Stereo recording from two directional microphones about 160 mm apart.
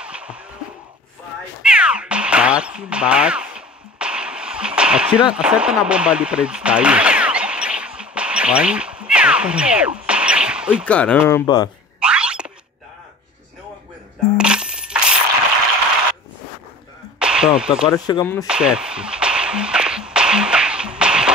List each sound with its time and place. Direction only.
0.0 s a sound: 5° right (ahead or behind)
1.6 s meow: 5° right (ahead or behind)
10.9 s speech: 10° left (ahead or behind)
11.4 s speech: 25° left (ahead or behind)
12.0 s a sound: 5° right (ahead or behind)
14.3 s coin: 5° right (ahead or behind)
17.2 s speech: 5° right (ahead or behind)
17.9 s speech: 25° left (ahead or behind)
18.2 s speech: 15° left (ahead or behind)
18.5 s music: 5° right (ahead or behind)